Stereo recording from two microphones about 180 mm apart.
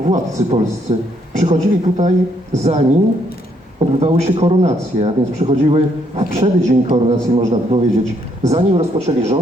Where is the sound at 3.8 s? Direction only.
35° right (ahead or behind).